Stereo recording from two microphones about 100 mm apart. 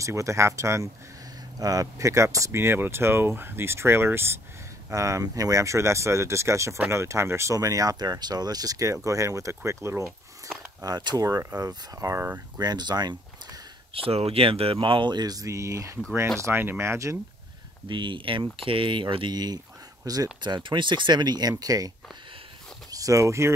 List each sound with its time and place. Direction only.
0.0 s speech: 30° right (ahead or behind)
10.8 s speech: 40° right (ahead or behind)
12.5 s speech: 45° right (ahead or behind)
13.9 s speech: 80° right; by 17.2 s 30° right (ahead or behind)
17.8 s speech: 55° right (ahead or behind)
20.4 s speech: 50° right (ahead or behind); by 23.5 s 30° right (ahead or behind)